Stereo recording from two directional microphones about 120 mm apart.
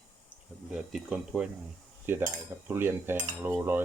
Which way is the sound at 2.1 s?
15° right (ahead or behind).